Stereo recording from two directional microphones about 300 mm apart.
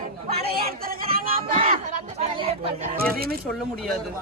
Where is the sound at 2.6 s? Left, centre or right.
Right.